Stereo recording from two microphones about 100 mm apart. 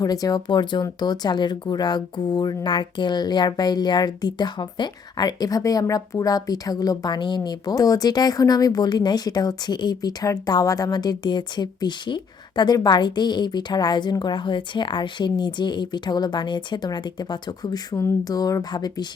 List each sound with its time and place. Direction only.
0.0 s speech: 40° left (ahead or behind)